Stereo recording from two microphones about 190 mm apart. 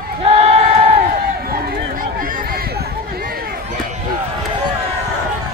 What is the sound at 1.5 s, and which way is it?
Run, 50° right (ahead or behind).